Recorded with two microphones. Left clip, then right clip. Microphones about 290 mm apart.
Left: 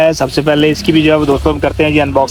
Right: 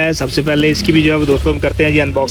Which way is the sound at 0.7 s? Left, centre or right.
Centre.